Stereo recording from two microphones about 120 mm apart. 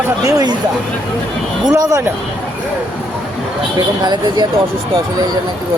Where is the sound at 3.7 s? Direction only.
35° right (ahead or behind).